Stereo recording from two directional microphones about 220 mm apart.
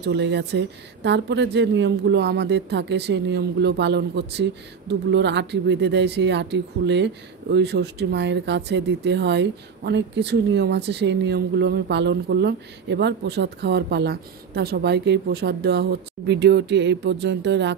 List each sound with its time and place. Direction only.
0.0 s speech: 50° right (ahead or behind)